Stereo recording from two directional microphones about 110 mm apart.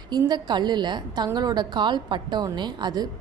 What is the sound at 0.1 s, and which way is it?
A woman's voice, 40° right (ahead or behind).